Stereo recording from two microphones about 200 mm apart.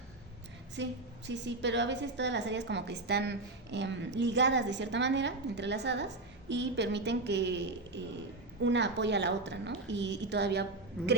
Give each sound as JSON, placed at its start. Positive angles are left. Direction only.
{"t": 0.8, "sound": "a woman's voice", "side_deg": -65}